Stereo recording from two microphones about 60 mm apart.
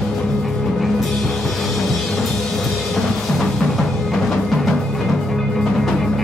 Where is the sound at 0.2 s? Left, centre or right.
Centre.